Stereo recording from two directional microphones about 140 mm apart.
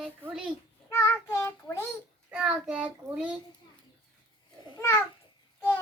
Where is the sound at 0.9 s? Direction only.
20° left (ahead or behind).